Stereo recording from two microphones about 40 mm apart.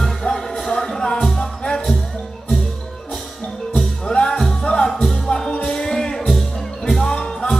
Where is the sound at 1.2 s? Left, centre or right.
Centre.